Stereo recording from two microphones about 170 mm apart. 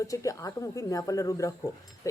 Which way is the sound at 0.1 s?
20° left (ahead or behind).